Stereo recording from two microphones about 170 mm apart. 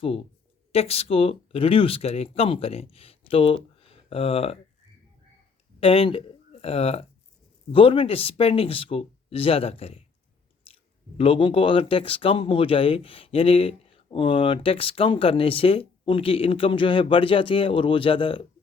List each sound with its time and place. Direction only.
0.0 s speech: 35° left (ahead or behind)
5.8 s speech: 35° left (ahead or behind)
11.2 s speech: 30° left (ahead or behind)